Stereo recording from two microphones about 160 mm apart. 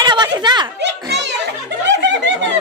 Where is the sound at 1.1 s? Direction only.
90° right.